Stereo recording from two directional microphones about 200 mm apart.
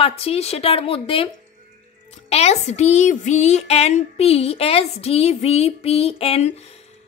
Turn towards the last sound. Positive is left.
turn(degrees=30)  # may be behind; listen again after turning